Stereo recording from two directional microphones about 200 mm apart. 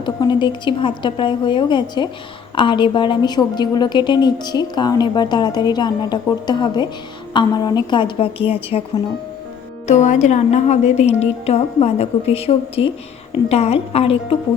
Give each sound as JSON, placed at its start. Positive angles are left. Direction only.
{"t": 0.0, "sound": "a woman's voice", "side_deg": 20}
{"t": 9.8, "sound": "a woman's voice", "side_deg": 35}